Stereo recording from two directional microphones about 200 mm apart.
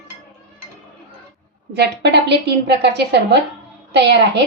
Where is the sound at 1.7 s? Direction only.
55° right (ahead or behind).